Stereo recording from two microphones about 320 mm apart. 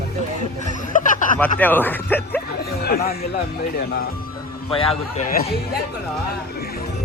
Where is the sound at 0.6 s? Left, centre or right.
Left.